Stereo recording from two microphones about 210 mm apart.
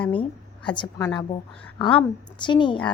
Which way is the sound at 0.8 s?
15° left (ahead or behind).